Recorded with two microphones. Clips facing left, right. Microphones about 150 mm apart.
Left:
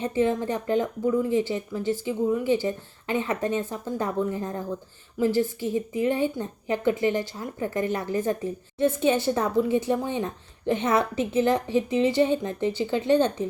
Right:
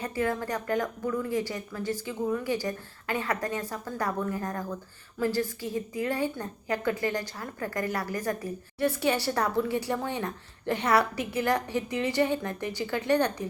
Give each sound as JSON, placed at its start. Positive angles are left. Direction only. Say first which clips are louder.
{"t": 0.0, "sound": "a woman's voice", "louder": "left 6 dB", "side_deg": 20}